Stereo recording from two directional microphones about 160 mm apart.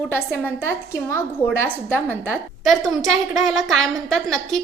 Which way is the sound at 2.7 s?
Centre (ahead or behind).